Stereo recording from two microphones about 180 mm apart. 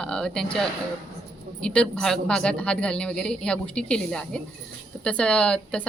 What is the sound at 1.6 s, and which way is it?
A woman's voice, 5° left (ahead or behind).